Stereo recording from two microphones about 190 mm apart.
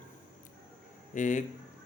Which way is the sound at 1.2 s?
40° left (ahead or behind).